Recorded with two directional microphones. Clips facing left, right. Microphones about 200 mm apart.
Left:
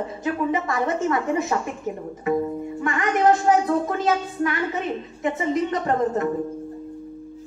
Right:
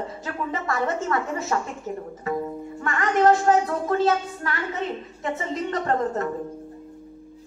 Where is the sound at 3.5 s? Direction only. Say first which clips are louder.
Left 1 dB; 15° left (ahead or behind).